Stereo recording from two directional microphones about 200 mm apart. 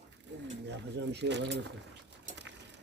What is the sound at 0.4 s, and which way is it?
Speech, 60° right (ahead or behind).